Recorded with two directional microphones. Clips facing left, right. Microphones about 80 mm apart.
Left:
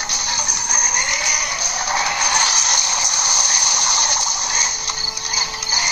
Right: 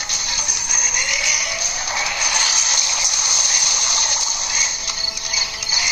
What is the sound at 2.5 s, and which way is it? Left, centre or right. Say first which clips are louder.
Turkey: left 3 dB; left.